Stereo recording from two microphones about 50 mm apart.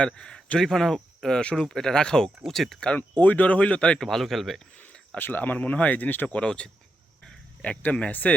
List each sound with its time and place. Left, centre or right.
0.0 s a man's voice: centre
3.2 s speech: left
4.0 s speech: centre
4.9 s speech: left
6.2 s speech: centre